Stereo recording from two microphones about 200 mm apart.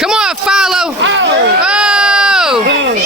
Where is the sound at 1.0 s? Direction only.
70° right (ahead or behind).